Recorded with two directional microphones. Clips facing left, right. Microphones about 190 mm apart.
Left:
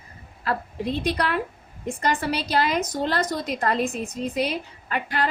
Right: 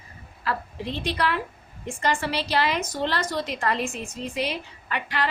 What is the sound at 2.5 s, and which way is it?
A woman's voice, 45° left (ahead or behind).